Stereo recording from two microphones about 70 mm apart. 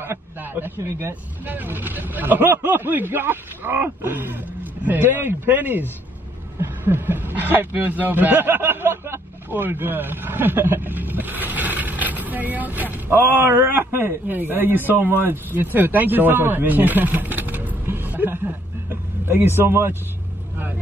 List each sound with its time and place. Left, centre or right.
0.0 s speech: right
1.4 s speech: right